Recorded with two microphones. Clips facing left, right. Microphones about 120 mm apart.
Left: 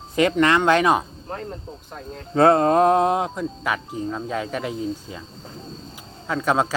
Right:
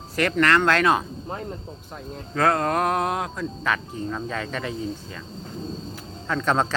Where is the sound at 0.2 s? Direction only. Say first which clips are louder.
Left 2 dB; 15° left (ahead or behind).